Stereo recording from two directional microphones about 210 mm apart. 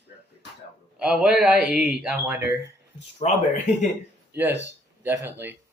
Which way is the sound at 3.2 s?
30° left (ahead or behind).